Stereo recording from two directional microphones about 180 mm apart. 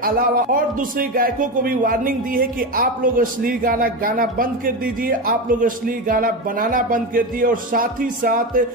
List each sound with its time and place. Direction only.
0.0 s a man's voice: 50° right (ahead or behind)